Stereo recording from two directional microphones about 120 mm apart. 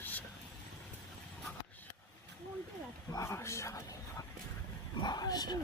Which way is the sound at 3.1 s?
25° left (ahead or behind).